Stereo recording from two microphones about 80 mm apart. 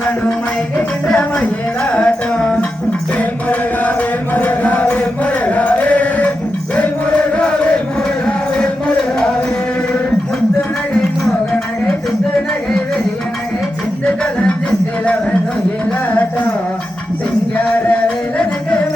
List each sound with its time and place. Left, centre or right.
1.0 s music: centre
4.4 s chant: left
7.3 s chant: centre
14.0 s music: centre